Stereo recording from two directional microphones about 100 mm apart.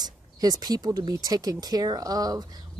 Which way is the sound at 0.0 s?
40° right (ahead or behind).